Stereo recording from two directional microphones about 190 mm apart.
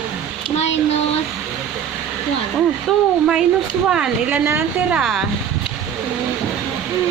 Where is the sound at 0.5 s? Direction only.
35° left (ahead or behind).